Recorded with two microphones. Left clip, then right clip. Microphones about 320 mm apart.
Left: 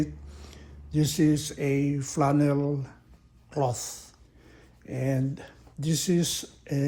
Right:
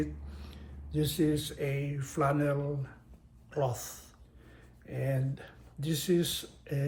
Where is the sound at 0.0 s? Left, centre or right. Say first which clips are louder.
Left 4 dB; centre.